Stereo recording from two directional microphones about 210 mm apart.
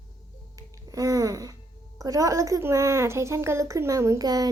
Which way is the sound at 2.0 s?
15° right (ahead or behind).